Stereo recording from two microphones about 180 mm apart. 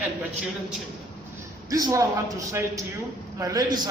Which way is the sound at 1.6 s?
20° right (ahead or behind).